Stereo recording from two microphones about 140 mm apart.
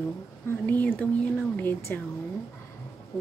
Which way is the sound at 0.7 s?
15° left (ahead or behind).